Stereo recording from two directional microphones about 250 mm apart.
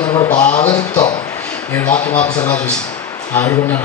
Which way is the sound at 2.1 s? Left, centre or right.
Centre.